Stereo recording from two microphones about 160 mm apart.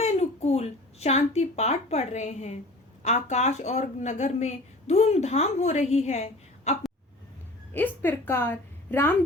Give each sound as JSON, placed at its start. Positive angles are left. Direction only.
{"t": 0.0, "sound": "speech", "side_deg": 40}
{"t": 7.7, "sound": "speech", "side_deg": 10}